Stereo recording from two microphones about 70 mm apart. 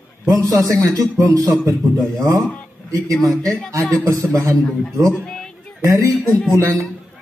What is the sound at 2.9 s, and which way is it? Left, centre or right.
A man's voice, right.